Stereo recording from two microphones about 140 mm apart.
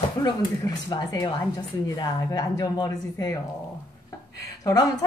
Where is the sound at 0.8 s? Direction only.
30° left (ahead or behind).